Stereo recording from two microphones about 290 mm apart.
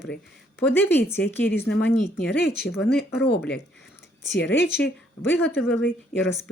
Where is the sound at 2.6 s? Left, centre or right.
Left.